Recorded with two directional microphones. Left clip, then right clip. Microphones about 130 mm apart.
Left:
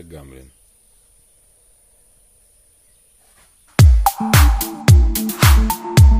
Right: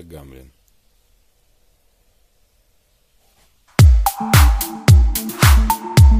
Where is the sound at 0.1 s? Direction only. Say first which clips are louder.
Even; 30° right (ahead or behind).